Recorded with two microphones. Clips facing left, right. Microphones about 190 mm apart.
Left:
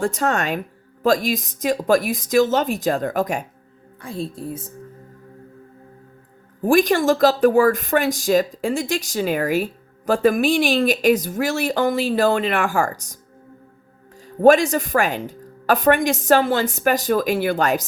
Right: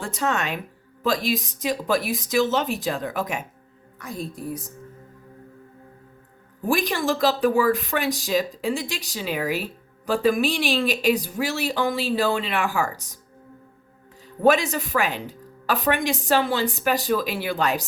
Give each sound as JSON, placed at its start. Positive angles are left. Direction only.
{"t": 0.2, "sound": "speech", "side_deg": 45}
{"t": 1.6, "sound": "speech", "side_deg": 45}
{"t": 4.0, "sound": "a woman's voice", "side_deg": 30}
{"t": 6.7, "sound": "speech", "side_deg": 50}
{"t": 14.3, "sound": "a woman's voice", "side_deg": 45}